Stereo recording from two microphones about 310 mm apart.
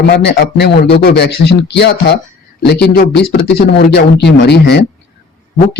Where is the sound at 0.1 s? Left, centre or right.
Left.